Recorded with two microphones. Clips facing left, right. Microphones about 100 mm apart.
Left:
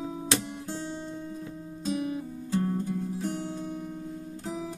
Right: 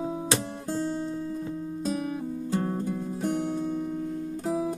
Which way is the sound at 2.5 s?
35° right (ahead or behind).